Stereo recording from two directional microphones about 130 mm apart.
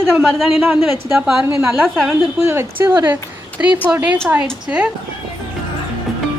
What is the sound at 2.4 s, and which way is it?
Speech, 20° right (ahead or behind).